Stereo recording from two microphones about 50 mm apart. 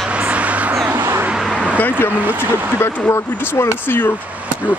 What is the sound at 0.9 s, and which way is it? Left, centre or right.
Vehicle, right.